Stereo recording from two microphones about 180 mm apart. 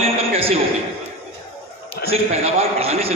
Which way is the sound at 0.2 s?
35° right (ahead or behind).